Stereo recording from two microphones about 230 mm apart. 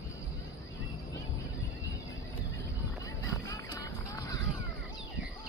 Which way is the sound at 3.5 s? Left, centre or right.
Centre.